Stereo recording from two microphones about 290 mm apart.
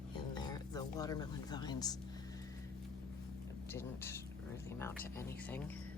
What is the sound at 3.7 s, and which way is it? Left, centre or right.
Speech, centre.